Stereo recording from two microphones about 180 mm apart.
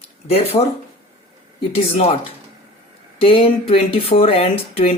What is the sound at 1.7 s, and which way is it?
Speech, 35° left (ahead or behind).